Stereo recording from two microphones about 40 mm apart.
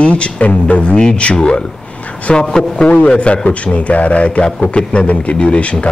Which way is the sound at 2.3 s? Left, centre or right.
Centre.